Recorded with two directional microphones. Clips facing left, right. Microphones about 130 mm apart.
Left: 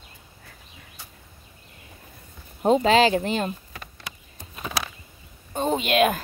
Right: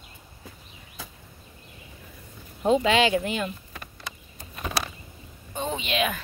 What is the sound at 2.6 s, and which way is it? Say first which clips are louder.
Speech: left 3 dB; 40° left (ahead or behind).